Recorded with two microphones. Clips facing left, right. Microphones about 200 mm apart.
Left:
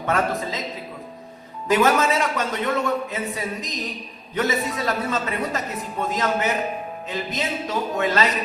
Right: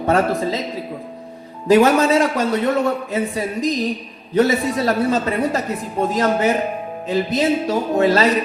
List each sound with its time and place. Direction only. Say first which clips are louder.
0.0 s a man's voice: right 6 dB; 35° right (ahead or behind)
1.6 s a man's voice: right 6 dB; 35° right (ahead or behind)